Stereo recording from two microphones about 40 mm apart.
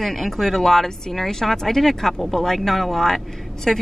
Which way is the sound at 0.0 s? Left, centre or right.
Centre.